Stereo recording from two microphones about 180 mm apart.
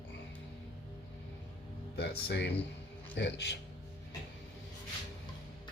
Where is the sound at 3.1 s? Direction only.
75° left (ahead or behind).